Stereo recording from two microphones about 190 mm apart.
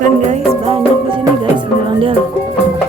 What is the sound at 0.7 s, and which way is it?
Music, 25° right (ahead or behind).